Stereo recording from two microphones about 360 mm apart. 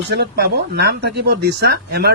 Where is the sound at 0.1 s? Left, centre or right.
Right.